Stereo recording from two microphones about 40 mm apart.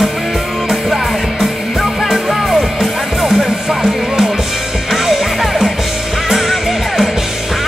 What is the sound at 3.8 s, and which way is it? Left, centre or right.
Music, right.